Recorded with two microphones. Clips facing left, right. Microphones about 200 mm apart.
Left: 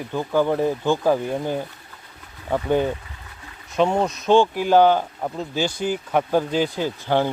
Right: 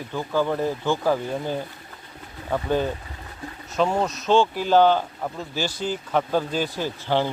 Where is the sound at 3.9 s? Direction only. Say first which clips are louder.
Left 3 dB; 15° left (ahead or behind).